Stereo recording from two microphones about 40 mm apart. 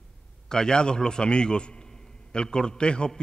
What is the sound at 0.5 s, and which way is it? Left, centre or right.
A man's voice, centre.